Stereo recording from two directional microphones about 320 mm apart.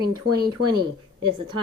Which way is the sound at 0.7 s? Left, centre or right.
Centre.